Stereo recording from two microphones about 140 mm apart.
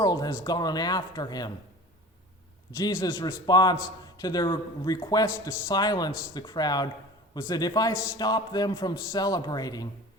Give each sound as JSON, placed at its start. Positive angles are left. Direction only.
{"t": 0.0, "sound": "a man's voice", "side_deg": 30}
{"t": 2.8, "sound": "a man's voice", "side_deg": 30}